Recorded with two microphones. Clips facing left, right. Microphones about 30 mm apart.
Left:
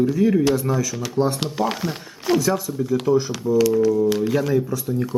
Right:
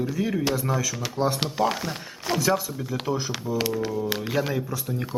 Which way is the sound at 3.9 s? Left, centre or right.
Centre.